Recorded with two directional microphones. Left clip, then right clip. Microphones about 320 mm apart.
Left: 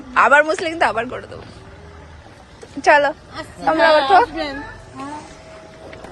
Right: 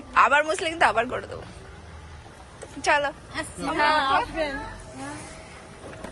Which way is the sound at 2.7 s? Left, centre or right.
Centre.